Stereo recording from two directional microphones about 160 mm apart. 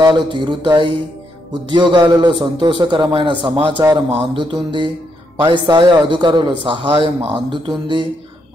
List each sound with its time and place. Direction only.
0.0 s a man's voice: 30° right (ahead or behind)
4.1 s a sound: 35° right (ahead or behind)
5.5 s a man's voice: 30° right (ahead or behind)